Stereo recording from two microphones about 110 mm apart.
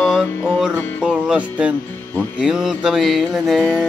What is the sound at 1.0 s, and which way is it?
Music, 10° right (ahead or behind).